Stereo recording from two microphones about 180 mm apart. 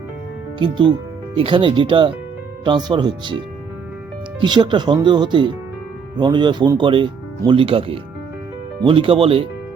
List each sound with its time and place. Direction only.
0.6 s speech: 25° right (ahead or behind)
4.4 s speech: 25° right (ahead or behind)